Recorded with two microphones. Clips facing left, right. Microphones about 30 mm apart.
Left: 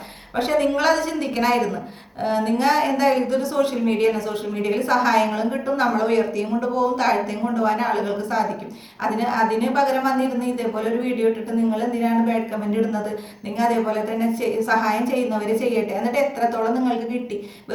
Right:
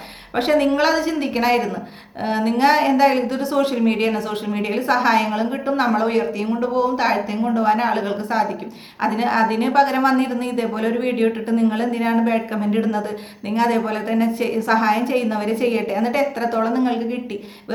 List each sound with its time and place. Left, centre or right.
0.3 s a woman's voice: right
4.7 s a woman's voice: right
7.4 s a woman's voice: right
11.0 s a woman's voice: right
11.4 s a woman's voice: right
12.7 s a woman's voice: right
14.7 s a woman's voice: right